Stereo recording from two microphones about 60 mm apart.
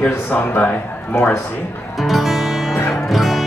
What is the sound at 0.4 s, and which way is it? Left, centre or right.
Speech, left.